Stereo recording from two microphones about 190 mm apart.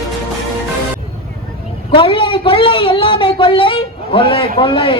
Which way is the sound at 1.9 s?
25° left (ahead or behind).